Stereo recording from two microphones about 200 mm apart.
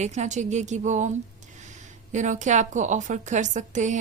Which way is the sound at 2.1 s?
40° right (ahead or behind).